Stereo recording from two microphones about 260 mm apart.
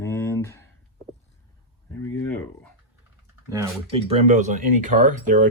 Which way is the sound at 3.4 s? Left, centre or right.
Centre.